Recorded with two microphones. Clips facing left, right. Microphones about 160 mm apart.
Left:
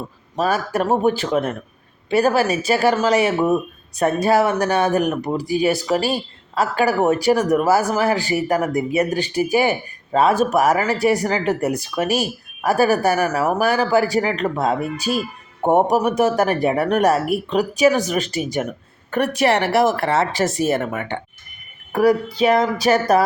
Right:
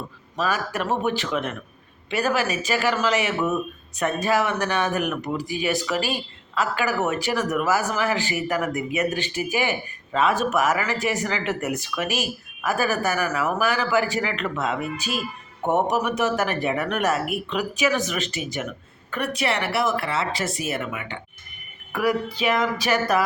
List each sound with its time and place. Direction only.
0.4 s speech: 35° left (ahead or behind)